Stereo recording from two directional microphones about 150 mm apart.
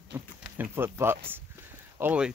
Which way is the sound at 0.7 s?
15° right (ahead or behind).